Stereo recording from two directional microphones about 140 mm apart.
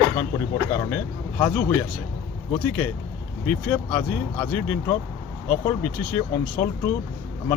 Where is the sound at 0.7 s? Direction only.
20° left (ahead or behind).